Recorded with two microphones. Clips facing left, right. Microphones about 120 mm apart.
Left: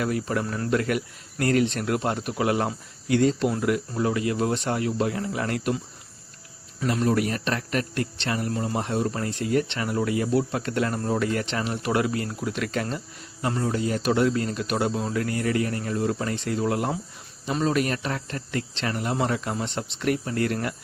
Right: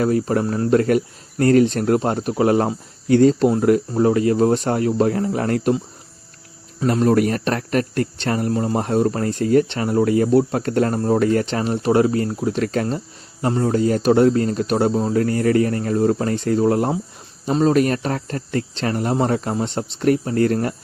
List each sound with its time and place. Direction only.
0.0 s speech: 35° right (ahead or behind)
6.7 s speech: 40° right (ahead or behind)